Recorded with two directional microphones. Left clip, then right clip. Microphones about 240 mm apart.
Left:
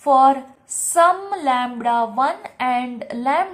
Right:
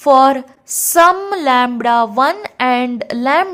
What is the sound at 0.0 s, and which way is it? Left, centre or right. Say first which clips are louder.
A woman's voice: right 4 dB; right.